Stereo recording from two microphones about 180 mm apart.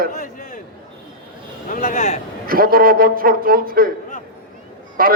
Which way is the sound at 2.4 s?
55° right (ahead or behind).